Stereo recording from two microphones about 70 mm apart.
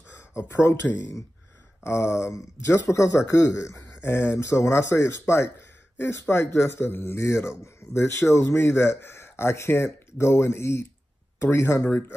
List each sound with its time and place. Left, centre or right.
0.4 s a man's voice: left
1.8 s a man's voice: left